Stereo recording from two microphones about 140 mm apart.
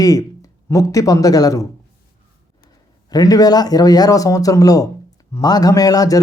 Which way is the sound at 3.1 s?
25° left (ahead or behind).